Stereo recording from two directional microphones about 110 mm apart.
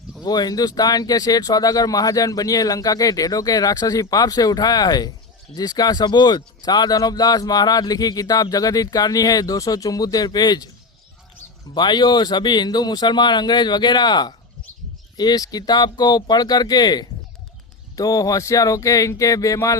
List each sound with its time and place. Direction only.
0.3 s speech: 35° left (ahead or behind)
11.7 s speech: 45° left (ahead or behind)